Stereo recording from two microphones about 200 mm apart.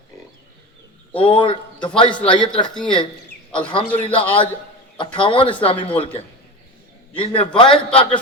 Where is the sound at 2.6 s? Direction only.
5° left (ahead or behind).